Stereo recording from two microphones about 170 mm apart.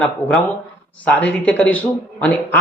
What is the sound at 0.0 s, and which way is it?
Speech, centre (ahead or behind).